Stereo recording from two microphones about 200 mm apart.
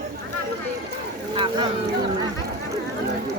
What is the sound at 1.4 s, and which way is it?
Speech, 25° right (ahead or behind).